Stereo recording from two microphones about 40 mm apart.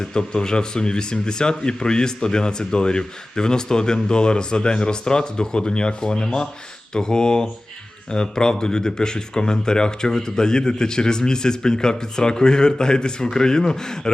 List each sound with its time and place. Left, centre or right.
0.1 s speech: centre